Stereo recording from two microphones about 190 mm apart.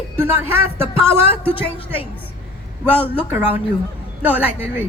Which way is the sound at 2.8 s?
10° right (ahead or behind).